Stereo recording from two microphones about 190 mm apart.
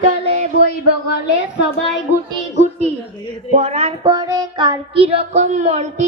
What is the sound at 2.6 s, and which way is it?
Speech, 35° right (ahead or behind).